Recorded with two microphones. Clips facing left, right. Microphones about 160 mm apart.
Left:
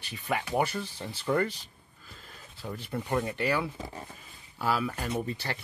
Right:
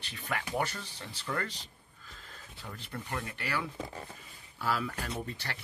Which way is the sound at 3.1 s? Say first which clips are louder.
Left 9 dB; 25° left (ahead or behind).